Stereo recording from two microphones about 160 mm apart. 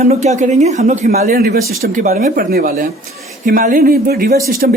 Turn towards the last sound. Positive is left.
turn(degrees=-65)  # may be behind; listen again after turning